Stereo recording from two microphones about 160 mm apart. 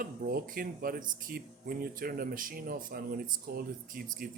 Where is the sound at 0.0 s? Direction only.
65° right (ahead or behind).